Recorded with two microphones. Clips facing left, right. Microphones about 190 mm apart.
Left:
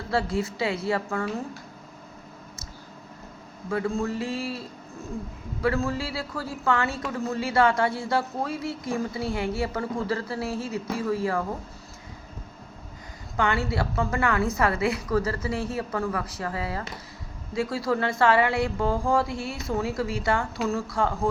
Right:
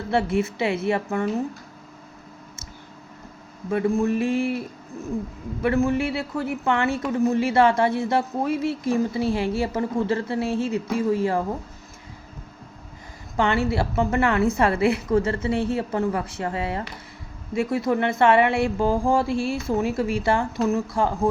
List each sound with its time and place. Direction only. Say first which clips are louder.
0.1 s speech: right 4 dB; 25° right (ahead or behind)
3.7 s speech: right 5 dB; 20° right (ahead or behind)
5.6 s speech: right 5 dB; 20° right (ahead or behind)
13.3 s speech: right 4 dB; 25° right (ahead or behind)